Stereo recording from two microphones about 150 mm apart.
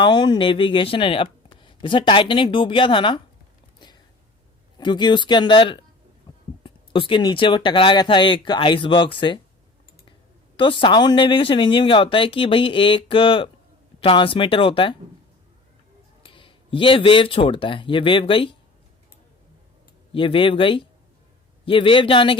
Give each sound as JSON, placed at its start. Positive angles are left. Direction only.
{"t": 0.0, "sound": "speech", "side_deg": 30}
{"t": 4.8, "sound": "speech", "side_deg": 30}
{"t": 10.6, "sound": "speech", "side_deg": 35}
{"t": 16.2, "sound": "speech", "side_deg": 35}
{"t": 20.1, "sound": "speech", "side_deg": 35}